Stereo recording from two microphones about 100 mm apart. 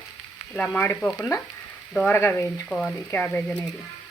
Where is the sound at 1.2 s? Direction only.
30° left (ahead or behind); by 3.6 s 15° left (ahead or behind).